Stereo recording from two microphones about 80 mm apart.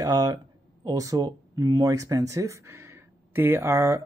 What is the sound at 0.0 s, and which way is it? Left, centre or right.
Speech, right.